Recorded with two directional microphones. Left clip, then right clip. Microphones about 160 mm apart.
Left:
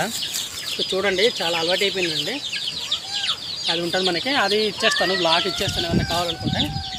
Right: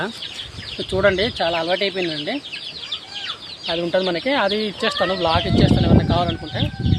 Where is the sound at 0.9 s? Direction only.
30° right (ahead or behind).